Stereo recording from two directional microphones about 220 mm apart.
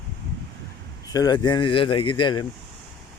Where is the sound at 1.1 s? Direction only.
15° left (ahead or behind).